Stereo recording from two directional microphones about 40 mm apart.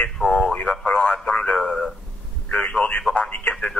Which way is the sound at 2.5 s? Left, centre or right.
Left.